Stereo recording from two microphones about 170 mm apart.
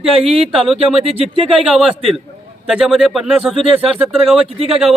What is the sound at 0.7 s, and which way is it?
Speech, centre (ahead or behind).